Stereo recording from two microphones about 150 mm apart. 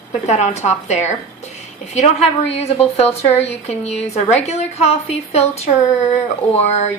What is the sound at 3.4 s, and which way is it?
A woman's voice, 45° left (ahead or behind).